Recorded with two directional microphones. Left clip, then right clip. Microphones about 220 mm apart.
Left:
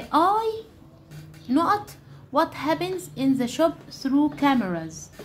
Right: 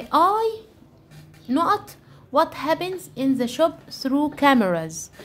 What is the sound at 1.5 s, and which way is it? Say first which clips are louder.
A child's voice: right 1 dB; 15° right (ahead or behind).